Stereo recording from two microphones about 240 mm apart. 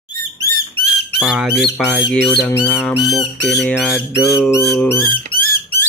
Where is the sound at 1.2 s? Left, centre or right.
Centre.